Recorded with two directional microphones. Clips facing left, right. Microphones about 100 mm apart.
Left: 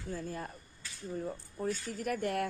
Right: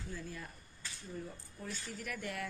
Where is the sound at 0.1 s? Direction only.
45° left (ahead or behind).